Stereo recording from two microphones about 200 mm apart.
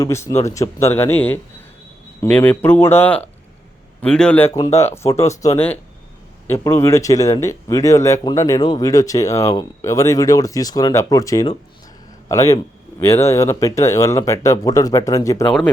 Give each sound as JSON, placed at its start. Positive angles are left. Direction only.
{"t": 0.0, "sound": "a man's voice", "side_deg": 15}